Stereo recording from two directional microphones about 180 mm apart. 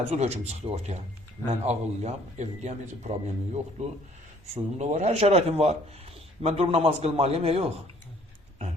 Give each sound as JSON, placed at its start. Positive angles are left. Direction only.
{"t": 0.1, "sound": "speech", "side_deg": -40}